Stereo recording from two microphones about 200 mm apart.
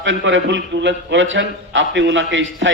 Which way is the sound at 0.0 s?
70° right (ahead or behind).